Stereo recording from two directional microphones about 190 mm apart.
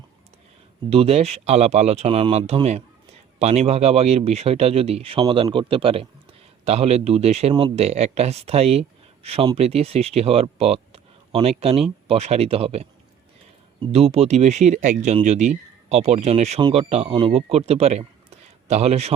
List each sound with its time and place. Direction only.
0.9 s speech: 30° right (ahead or behind)
13.9 s speech: 30° right (ahead or behind)